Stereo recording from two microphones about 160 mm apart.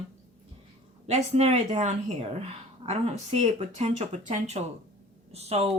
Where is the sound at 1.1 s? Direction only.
40° right (ahead or behind).